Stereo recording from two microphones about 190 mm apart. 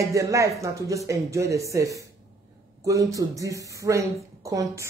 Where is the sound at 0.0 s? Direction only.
15° right (ahead or behind).